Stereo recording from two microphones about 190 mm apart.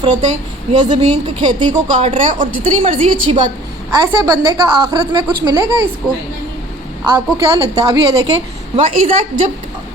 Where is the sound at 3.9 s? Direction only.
20° right (ahead or behind).